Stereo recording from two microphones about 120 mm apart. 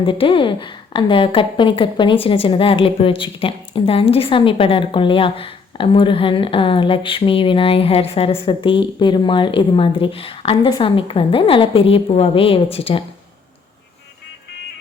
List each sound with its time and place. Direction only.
0.0 s a woman's voice: 45° left (ahead or behind)